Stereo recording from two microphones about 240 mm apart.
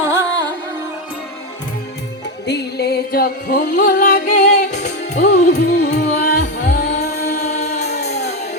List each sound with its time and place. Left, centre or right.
0.0 s music: centre
2.5 s music: left
7.8 s music: left